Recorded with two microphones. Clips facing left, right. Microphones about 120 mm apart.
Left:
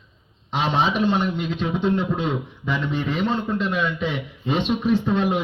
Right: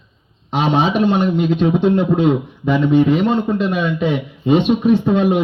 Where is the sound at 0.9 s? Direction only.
60° right (ahead or behind).